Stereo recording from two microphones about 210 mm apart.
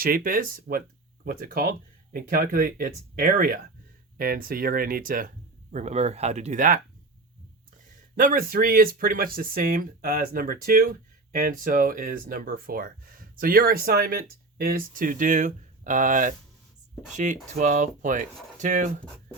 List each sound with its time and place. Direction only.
0.0 s speech: 40° right (ahead or behind)
8.1 s speech: 40° right (ahead or behind)